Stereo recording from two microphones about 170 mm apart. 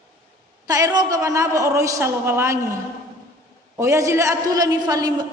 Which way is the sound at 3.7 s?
15° right (ahead or behind).